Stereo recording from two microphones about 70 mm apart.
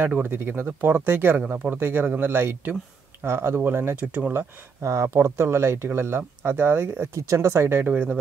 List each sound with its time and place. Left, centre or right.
0.2 s speech: right
4.3 s speech: right
7.2 s speech: right
7.8 s speech: centre